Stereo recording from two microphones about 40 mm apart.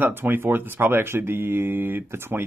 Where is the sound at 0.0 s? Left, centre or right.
Right.